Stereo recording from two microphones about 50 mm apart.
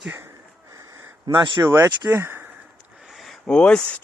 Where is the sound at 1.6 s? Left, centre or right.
Right.